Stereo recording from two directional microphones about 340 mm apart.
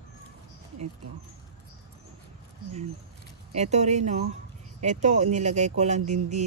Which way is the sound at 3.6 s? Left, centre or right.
Centre.